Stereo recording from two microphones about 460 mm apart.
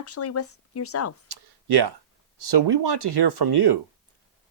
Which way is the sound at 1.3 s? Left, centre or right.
Right.